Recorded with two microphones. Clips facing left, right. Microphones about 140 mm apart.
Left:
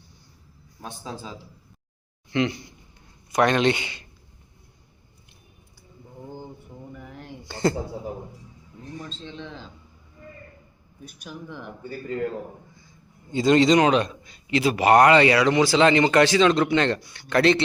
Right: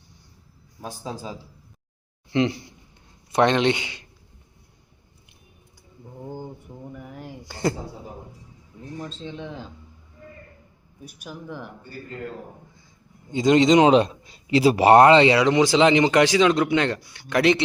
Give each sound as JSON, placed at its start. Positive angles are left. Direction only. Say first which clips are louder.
{"t": 2.3, "sound": "a man's voice", "louder": "right 2 dB", "side_deg": -25}
{"t": 6.2, "sound": "mantra", "louder": "right 4 dB", "side_deg": -10}
{"t": 7.0, "sound": "a sound", "louder": "right 2 dB", "side_deg": -10}
{"t": 9.0, "sound": "a man's voice", "louder": "right 3 dB", "side_deg": -10}
{"t": 11.0, "sound": "a man's voice", "louder": "right 1 dB", "side_deg": -10}
{"t": 13.3, "sound": "a man's voice", "louder": "right 1 dB", "side_deg": -15}